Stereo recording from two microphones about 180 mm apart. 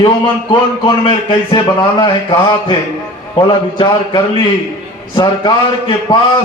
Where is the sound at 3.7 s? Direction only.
25° left (ahead or behind).